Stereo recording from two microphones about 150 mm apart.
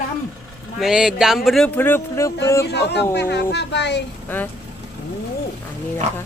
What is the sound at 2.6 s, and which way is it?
Speech, 90° left.